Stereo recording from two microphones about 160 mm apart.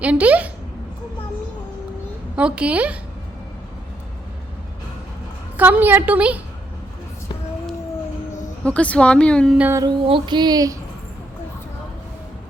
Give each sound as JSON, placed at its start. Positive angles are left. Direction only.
{"t": 0.0, "sound": "a woman's voice", "side_deg": -10}
{"t": 2.3, "sound": "a woman's voice", "side_deg": -5}
{"t": 5.5, "sound": "a woman's voice", "side_deg": -10}
{"t": 8.6, "sound": "speech", "side_deg": 10}
{"t": 9.6, "sound": "a woman's voice", "side_deg": -15}
{"t": 9.8, "sound": "a sound", "side_deg": -30}